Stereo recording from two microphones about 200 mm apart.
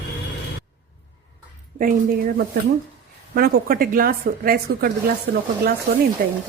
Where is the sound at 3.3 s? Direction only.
50° right (ahead or behind).